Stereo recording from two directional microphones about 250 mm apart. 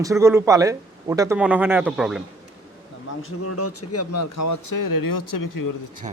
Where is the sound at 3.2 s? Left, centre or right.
Left.